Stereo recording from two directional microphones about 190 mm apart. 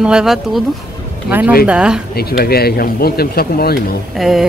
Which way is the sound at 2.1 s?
55° left (ahead or behind).